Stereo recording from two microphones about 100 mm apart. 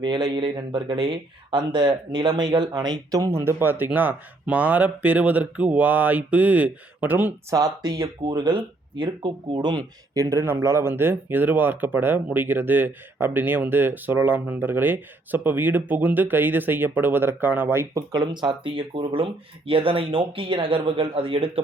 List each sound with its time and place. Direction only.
0.0 s speech: 45° right (ahead or behind); by 7.3 s 15° right (ahead or behind)
7.5 s speech: 40° right (ahead or behind)
10.2 s speech: 25° right (ahead or behind)
18.1 s speech: 45° right (ahead or behind); by 21.6 s 65° right (ahead or behind)